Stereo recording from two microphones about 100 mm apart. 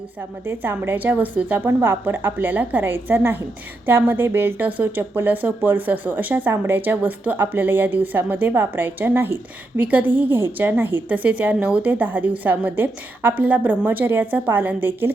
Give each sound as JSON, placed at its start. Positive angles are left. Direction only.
{"t": 0.4, "sound": "a woman's voice", "side_deg": -20}